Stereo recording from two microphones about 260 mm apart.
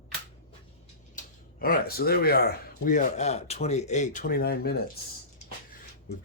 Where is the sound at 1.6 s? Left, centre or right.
Left.